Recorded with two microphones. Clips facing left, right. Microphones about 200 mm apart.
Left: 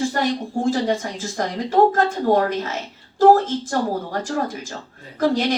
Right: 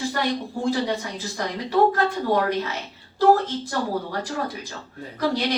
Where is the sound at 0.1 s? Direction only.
45° left (ahead or behind).